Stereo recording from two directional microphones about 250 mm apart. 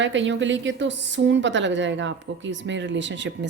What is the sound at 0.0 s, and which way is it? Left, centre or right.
A woman's voice, right.